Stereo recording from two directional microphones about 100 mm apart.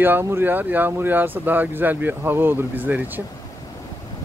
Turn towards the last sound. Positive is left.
turn(degrees=-15)  # may be behind; listen again after turning